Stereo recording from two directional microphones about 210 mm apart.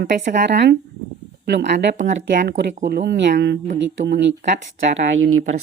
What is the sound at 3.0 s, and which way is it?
Speech, 55° right (ahead or behind).